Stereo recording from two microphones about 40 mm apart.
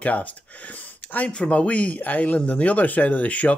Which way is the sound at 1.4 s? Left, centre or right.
Left.